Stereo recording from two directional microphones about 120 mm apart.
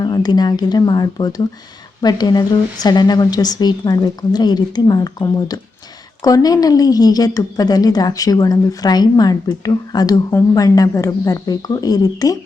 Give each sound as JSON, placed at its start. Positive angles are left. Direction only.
{"t": 0.0, "sound": "speech", "side_deg": 35}